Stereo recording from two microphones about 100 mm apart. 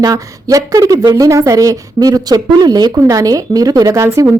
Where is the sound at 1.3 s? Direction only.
35° right (ahead or behind).